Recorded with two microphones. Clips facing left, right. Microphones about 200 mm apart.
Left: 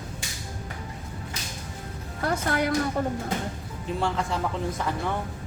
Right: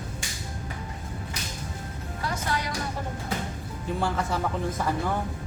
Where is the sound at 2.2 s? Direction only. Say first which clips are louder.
Left 5 dB; 55° left (ahead or behind).